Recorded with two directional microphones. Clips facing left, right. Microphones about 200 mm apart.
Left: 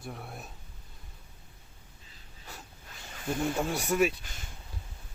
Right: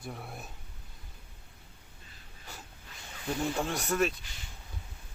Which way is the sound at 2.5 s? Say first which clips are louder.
Left 1 dB; centre (ahead or behind).